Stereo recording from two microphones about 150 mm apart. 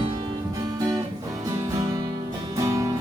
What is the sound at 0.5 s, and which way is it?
Music, 20° right (ahead or behind).